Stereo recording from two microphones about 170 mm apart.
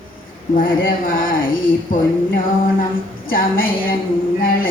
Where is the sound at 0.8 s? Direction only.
55° left (ahead or behind).